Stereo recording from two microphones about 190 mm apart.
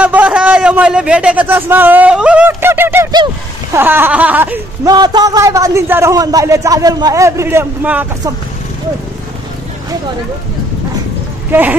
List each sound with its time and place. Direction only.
0.0 s a man's voice: 5° right (ahead or behind)
4.8 s a man's voice: 20° right (ahead or behind)